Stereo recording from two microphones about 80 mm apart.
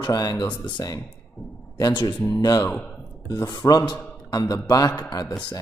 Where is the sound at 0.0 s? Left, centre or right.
Left.